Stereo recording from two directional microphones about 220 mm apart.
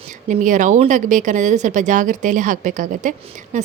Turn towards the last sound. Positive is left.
turn(degrees=-35)  # may be behind; listen again after turning